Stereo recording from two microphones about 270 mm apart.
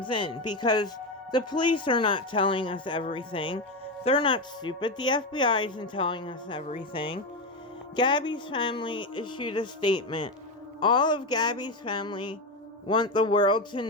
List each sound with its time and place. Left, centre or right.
0.0 s speech: centre